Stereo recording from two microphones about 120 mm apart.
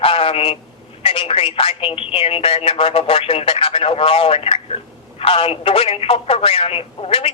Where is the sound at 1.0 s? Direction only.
55° left (ahead or behind).